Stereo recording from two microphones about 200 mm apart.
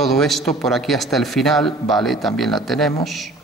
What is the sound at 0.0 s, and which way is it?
A man's voice, centre (ahead or behind).